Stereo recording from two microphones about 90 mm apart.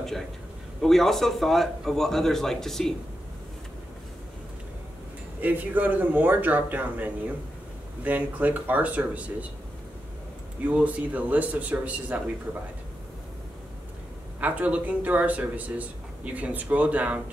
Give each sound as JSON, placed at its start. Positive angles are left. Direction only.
{"t": 0.7, "sound": "a man's voice", "side_deg": 5}
{"t": 5.4, "sound": "speech", "side_deg": -20}
{"t": 10.6, "sound": "speech", "side_deg": -15}
{"t": 14.4, "sound": "speech", "side_deg": -15}